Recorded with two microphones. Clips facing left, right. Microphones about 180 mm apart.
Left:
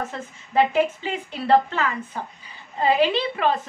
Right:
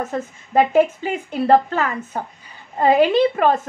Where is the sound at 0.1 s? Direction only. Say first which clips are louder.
Right 5 dB; 45° right (ahead or behind).